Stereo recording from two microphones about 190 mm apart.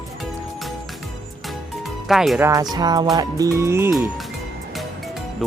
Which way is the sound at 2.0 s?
Centre (ahead or behind).